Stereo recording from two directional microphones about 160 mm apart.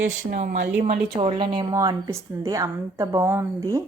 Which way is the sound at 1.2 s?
30° right (ahead or behind).